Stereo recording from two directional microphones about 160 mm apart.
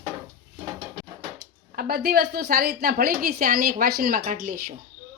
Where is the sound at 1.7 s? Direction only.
70° right (ahead or behind).